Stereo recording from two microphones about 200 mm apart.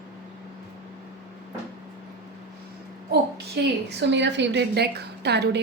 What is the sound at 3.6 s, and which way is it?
Speech, 55° right (ahead or behind).